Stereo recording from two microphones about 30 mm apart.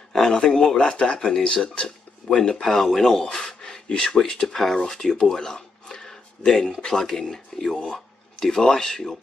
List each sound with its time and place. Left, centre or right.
0.1 s a sound: left
0.7 s speech: left
2.2 s speech: left
2.5 s speech: centre
3.2 s a sound: left
4.3 s speech: left
4.6 s speech: centre
5.2 s a sound: left
6.9 s speech: centre